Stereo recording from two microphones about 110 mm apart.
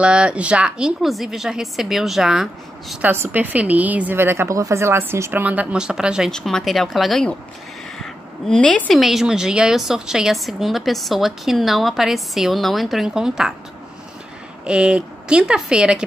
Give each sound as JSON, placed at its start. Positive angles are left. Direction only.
{"t": 0.0, "sound": "a woman's voice", "side_deg": -10}
{"t": 3.0, "sound": "a woman's voice", "side_deg": -15}
{"t": 9.0, "sound": "a woman's voice", "side_deg": -5}
{"t": 14.6, "sound": "a woman's voice", "side_deg": -10}